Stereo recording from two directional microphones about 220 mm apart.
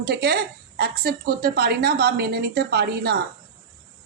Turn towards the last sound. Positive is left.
turn(degrees=-45)  # may be behind; listen again after turning